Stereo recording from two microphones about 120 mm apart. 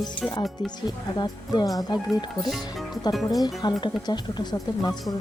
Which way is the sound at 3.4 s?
35° left (ahead or behind).